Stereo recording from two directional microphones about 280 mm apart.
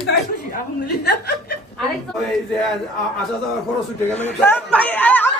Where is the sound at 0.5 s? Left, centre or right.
Left.